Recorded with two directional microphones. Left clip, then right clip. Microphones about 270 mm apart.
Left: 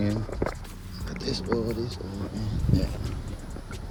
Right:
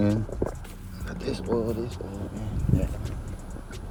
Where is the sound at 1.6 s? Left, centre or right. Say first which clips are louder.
Right 1 dB; centre.